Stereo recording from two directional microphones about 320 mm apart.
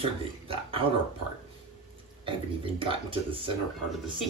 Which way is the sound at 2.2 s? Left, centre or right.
Centre.